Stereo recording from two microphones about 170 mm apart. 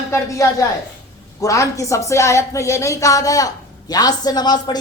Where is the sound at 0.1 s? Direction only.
20° left (ahead or behind).